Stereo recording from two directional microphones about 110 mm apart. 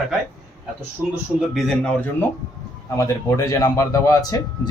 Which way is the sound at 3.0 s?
30° left (ahead or behind).